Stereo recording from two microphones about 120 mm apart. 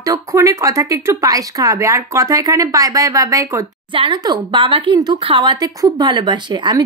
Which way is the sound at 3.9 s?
45° right (ahead or behind).